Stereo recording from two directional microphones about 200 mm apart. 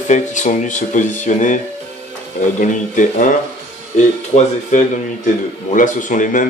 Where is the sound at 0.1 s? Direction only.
40° left (ahead or behind).